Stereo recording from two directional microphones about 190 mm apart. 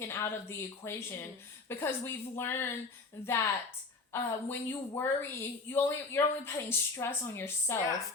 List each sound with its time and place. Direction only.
0.0 s a woman's voice: 15° left (ahead or behind)
4.1 s a woman's voice: 10° left (ahead or behind)